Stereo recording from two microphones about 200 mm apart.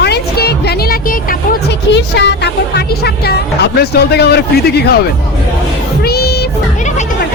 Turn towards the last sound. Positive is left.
turn(degrees=50)  # may be behind; listen again after turning